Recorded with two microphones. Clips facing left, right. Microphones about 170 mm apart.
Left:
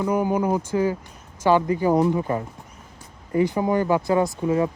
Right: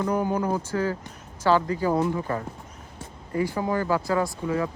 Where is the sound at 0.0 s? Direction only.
10° left (ahead or behind).